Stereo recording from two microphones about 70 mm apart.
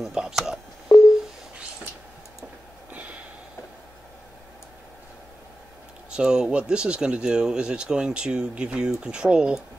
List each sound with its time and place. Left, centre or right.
0.0 s speech: centre
0.9 s busy signal: left
2.9 s sniff: right
6.0 s speech: centre